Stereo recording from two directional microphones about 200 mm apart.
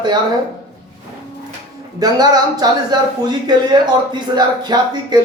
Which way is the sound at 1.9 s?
20° right (ahead or behind).